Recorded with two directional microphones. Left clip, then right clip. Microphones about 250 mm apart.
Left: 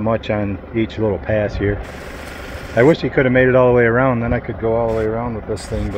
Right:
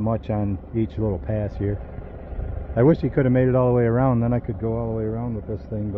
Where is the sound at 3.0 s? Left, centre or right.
Centre.